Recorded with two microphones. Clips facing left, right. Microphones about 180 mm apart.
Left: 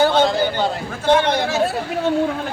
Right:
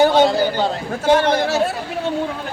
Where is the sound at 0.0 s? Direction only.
15° right (ahead or behind).